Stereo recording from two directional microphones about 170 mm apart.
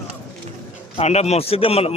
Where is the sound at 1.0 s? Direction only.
40° left (ahead or behind).